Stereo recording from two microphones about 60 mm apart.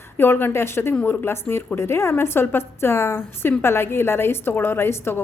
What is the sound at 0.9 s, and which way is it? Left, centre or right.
A woman's voice, left.